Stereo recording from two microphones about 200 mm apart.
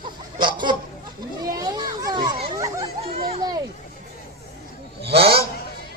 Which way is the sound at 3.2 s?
30° right (ahead or behind).